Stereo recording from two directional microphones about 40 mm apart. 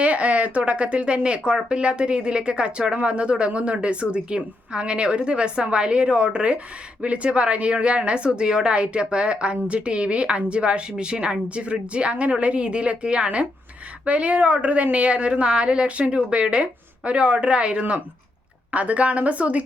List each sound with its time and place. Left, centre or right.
0.0 s a woman's voice: right